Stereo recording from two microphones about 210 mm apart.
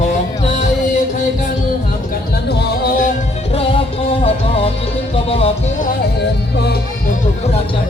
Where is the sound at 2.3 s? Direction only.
50° left (ahead or behind).